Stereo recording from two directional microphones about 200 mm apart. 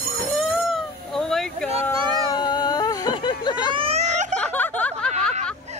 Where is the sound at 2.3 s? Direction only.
20° left (ahead or behind).